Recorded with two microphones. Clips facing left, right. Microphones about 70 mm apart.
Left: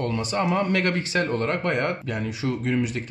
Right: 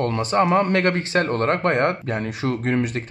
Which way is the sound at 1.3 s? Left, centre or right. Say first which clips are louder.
Right 4 dB; right.